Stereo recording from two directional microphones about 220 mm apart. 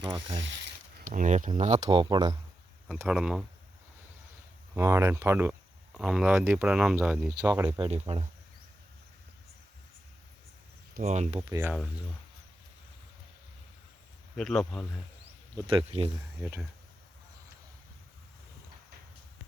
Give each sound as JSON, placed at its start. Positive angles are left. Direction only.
{"t": 0.0, "sound": "speech", "side_deg": -20}
{"t": 1.0, "sound": "speech", "side_deg": -35}
{"t": 1.8, "sound": "speech", "side_deg": -20}
{"t": 2.8, "sound": "speech", "side_deg": -5}
{"t": 4.7, "sound": "speech", "side_deg": -15}
{"t": 7.8, "sound": "speech", "side_deg": -25}
{"t": 10.9, "sound": "speech", "side_deg": -30}
{"t": 14.3, "sound": "speech", "side_deg": 0}
{"t": 15.5, "sound": "speech", "side_deg": -25}
{"t": 16.4, "sound": "speech", "side_deg": -5}